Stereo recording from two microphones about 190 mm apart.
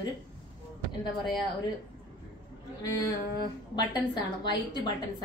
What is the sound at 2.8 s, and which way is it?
Speech, 20° left (ahead or behind).